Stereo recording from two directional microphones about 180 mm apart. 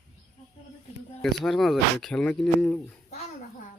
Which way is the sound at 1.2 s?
Centre (ahead or behind).